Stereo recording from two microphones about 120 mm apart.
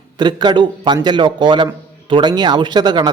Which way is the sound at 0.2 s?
40° right (ahead or behind).